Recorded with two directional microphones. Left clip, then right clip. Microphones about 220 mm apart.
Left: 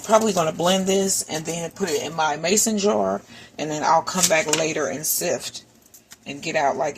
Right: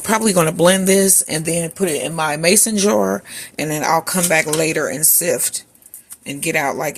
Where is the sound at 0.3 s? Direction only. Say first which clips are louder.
Right 6 dB; 45° right (ahead or behind).